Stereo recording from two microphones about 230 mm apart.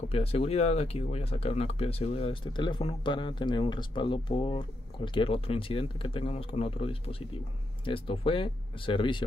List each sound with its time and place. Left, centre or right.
0.1 s speech: left